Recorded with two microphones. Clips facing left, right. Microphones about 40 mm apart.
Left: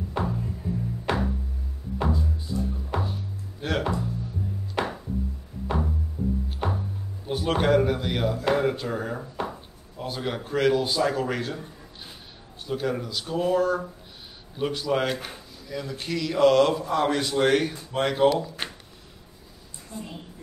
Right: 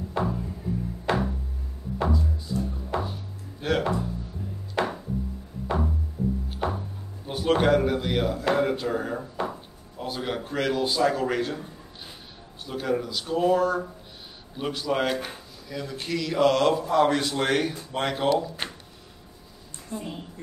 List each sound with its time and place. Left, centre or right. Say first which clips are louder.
0.1 s music: right 1 dB; centre
2.5 s music: right 1 dB; centre
3.6 s a man's voice: right 2 dB; centre
4.7 s music: right 2 dB; centre
6.5 s music: right 1 dB; centre
7.2 s speech: right 2 dB; centre
12.6 s a man's voice: right 1 dB; centre
19.9 s a woman's voice: right 4 dB; centre